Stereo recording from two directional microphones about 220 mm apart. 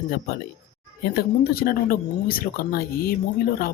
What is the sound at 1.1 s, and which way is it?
Speech, 45° left (ahead or behind).